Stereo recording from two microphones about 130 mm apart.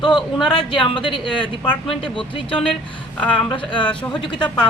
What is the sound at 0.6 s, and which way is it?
A woman's voice, 40° left (ahead or behind).